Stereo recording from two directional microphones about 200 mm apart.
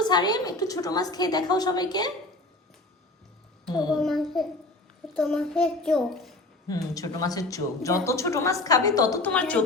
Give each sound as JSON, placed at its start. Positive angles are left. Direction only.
{"t": 0.0, "sound": "a woman's voice", "side_deg": 20}
{"t": 3.7, "sound": "a woman's voice", "side_deg": 20}
{"t": 4.0, "sound": "child singing", "side_deg": 0}
{"t": 5.1, "sound": "a child's voice", "side_deg": 0}
{"t": 6.7, "sound": "speech", "side_deg": 15}